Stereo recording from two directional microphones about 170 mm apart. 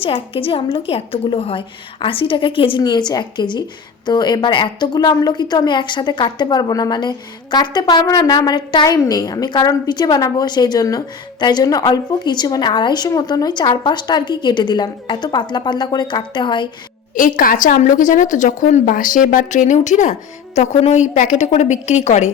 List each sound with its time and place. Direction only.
0.0 s a woman's voice: 35° left (ahead or behind)
17.2 s a woman's voice: 50° left (ahead or behind)